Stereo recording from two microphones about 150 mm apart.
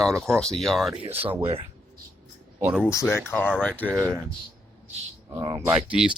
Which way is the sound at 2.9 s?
20° left (ahead or behind).